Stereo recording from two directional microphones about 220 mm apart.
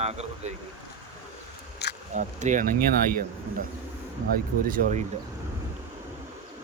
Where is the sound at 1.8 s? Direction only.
50° left (ahead or behind).